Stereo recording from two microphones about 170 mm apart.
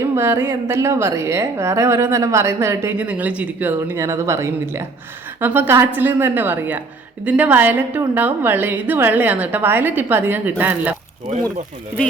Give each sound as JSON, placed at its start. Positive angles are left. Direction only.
{"t": 0.0, "sound": "a woman's voice", "side_deg": -15}